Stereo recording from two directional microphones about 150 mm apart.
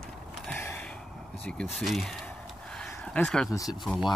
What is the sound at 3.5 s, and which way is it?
Speech, 20° left (ahead or behind).